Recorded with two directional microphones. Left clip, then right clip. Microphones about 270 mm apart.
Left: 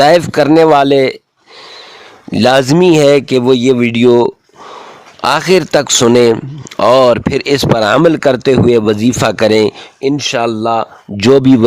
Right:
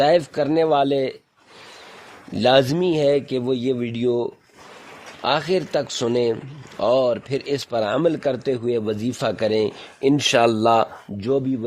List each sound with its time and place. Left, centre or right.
0.0 s speech: left
2.3 s speech: left; by 10.8 s centre
11.2 s speech: left